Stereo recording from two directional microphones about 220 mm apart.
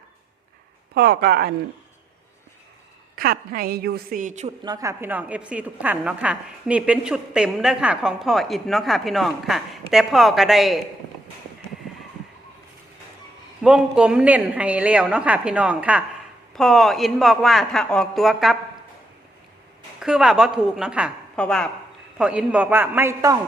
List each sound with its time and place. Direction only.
0.9 s speech: 45° right (ahead or behind)
3.2 s a woman's voice: 40° right (ahead or behind)
4.6 s a woman's voice: 15° right (ahead or behind); by 10.8 s centre (ahead or behind)
13.6 s a woman's voice: 5° right (ahead or behind)
20.0 s a woman's voice: 5° right (ahead or behind)